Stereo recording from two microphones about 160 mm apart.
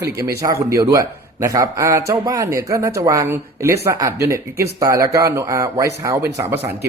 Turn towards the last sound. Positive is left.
turn(degrees=-15)  # may be behind; listen again after turning